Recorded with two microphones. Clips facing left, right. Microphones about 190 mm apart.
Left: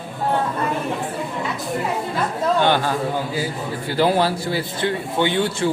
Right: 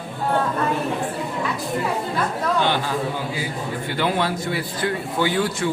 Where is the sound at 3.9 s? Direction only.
35° left (ahead or behind).